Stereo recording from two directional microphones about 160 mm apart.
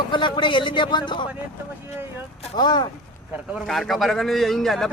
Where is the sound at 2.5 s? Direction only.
25° left (ahead or behind).